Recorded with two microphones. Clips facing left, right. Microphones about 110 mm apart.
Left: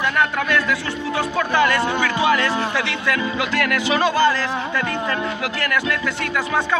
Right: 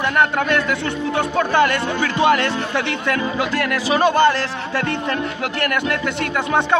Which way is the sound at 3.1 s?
40° right (ahead or behind).